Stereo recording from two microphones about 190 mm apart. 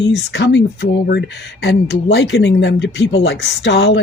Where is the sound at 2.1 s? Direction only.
70° left (ahead or behind).